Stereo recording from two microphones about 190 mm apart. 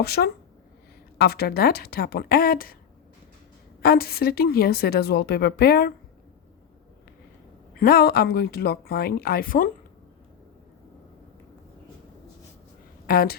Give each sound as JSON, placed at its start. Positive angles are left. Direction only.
{"t": 0.0, "sound": "a woman's voice", "side_deg": 55}
{"t": 3.8, "sound": "a woman's voice", "side_deg": 50}
{"t": 7.8, "sound": "a woman's voice", "side_deg": 50}
{"t": 13.1, "sound": "a woman's voice", "side_deg": 50}